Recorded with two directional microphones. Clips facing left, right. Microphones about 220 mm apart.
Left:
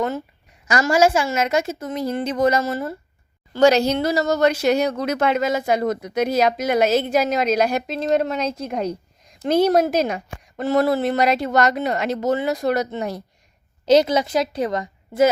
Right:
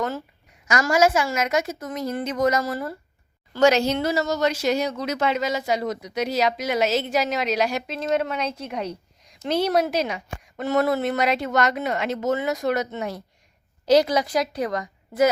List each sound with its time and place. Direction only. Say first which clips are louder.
0.7 s a woman's voice: left 2 dB; 30° left (ahead or behind)
3.5 s a woman's voice: left 3 dB; 35° left (ahead or behind)
4.3 s speech: left 5 dB; 55° left (ahead or behind)
10.6 s a woman's voice: left 3 dB; 35° left (ahead or behind)
13.8 s a woman's voice: left 2 dB; 25° left (ahead or behind)